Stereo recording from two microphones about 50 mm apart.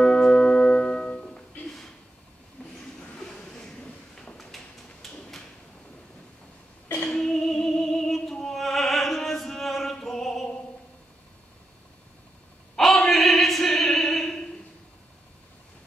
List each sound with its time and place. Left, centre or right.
0.0 s music: centre
2.6 s vehicle: left
3.6 s train: centre
5.0 s drawer open or close: centre
7.1 s music: centre
12.7 s a sound: centre